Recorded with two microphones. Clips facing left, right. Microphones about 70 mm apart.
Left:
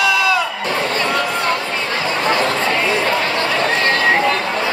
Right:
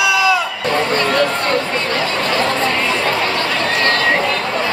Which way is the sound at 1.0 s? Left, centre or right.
Centre.